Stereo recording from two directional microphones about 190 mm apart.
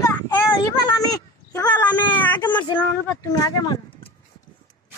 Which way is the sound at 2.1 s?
10° left (ahead or behind).